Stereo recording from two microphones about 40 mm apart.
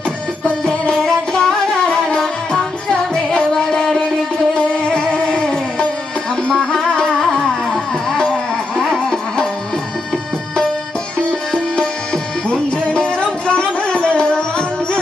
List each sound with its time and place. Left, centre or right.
0.4 s music: left
4.5 s music: left
8.2 s music: centre
11.8 s music: centre